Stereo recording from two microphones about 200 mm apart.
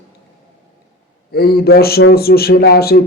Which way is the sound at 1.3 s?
50° left (ahead or behind).